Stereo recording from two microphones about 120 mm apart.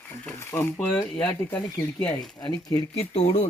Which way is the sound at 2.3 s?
35° left (ahead or behind).